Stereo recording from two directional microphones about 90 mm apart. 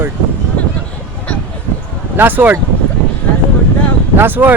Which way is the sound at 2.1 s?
20° right (ahead or behind).